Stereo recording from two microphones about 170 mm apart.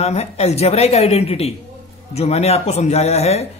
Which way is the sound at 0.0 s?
40° left (ahead or behind).